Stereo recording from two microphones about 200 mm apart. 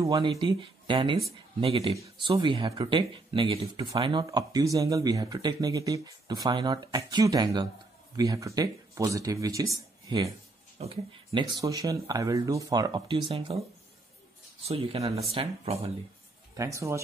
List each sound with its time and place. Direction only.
0.0 s speech: 20° right (ahead or behind)
14.7 s speech: 30° right (ahead or behind)
16.5 s speech: 15° right (ahead or behind)